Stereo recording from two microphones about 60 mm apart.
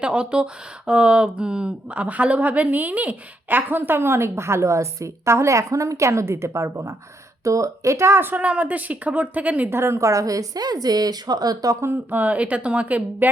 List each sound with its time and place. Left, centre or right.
0.0 s speech: centre; by 8.2 s right
8.4 s speech: right
9.6 s a woman's voice: right
12.1 s speech: right